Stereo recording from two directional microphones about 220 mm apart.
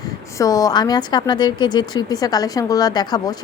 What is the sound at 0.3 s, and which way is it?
A woman's voice, 15° left (ahead or behind).